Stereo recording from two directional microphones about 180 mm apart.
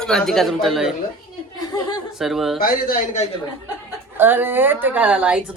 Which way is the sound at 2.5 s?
55° left (ahead or behind).